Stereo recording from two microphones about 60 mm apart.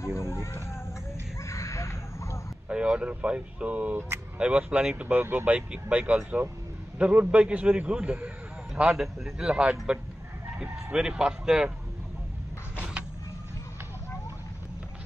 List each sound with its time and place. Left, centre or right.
0.0 s a sound: left
2.7 s speech: centre
5.0 s speech: right
8.8 s speech: centre
9.5 s speech: centre
12.7 s vehicle: right